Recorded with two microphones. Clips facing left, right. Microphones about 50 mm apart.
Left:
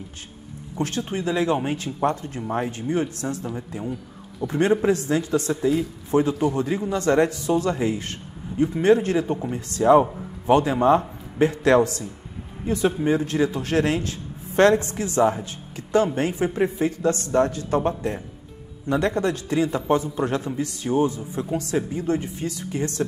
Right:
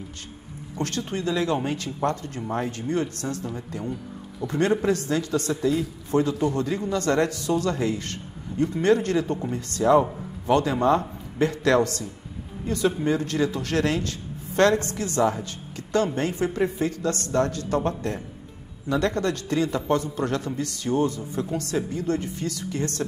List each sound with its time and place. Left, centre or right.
0.7 s a man's voice: centre
4.8 s a man's voice: centre